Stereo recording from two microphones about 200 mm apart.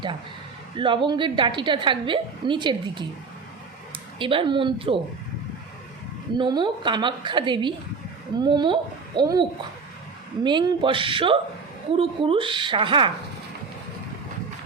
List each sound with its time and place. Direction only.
0.8 s a woman's voice: 25° right (ahead or behind)
4.2 s a woman's voice: 25° right (ahead or behind)
6.3 s a woman's voice: 20° right (ahead or behind)